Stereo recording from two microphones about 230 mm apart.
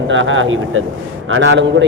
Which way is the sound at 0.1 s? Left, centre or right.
Right.